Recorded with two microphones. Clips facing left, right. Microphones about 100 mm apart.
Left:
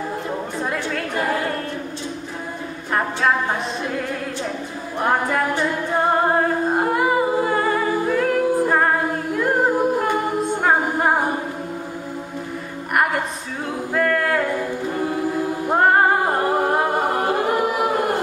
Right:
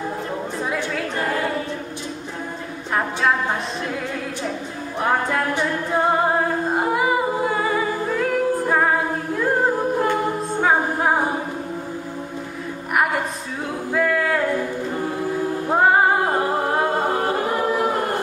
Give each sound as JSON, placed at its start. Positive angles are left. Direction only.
{"t": 0.6, "sound": "chatter", "side_deg": 0}
{"t": 5.9, "sound": "a capella", "side_deg": 0}
{"t": 13.9, "sound": "a capella", "side_deg": 0}
{"t": 15.7, "sound": "singing", "side_deg": 0}
{"t": 17.6, "sound": "a sound", "side_deg": 15}